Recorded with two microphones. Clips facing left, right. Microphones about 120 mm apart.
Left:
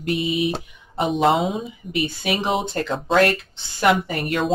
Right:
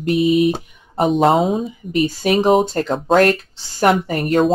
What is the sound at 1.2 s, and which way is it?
Speech, 40° right (ahead or behind).